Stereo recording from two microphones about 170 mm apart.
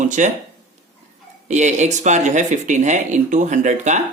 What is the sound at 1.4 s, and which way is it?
A man's voice, 45° right (ahead or behind).